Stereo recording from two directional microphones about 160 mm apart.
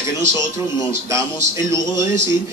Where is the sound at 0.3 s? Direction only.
30° left (ahead or behind).